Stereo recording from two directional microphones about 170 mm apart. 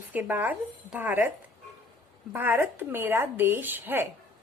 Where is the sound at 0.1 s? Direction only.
10° right (ahead or behind).